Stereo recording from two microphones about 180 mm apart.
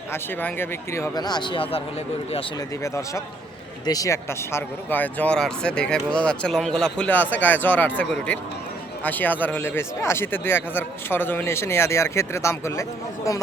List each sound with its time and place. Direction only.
0.1 s speech: 10° left (ahead or behind); by 1.8 s 30° left (ahead or behind)
2.6 s speech: 15° left (ahead or behind)
9.0 s speech: 10° left (ahead or behind)